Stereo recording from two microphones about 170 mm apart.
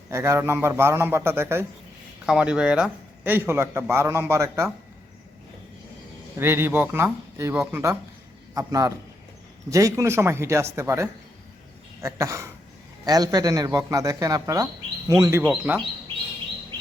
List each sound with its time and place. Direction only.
0.1 s speech: 15° right (ahead or behind)
6.3 s speech: 15° right (ahead or behind)